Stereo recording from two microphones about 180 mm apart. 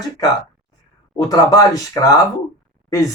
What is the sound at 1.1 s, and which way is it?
Speech, 20° left (ahead or behind).